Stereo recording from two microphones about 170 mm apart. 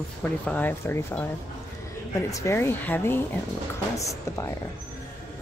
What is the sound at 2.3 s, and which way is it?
A woman's voice, 15° left (ahead or behind).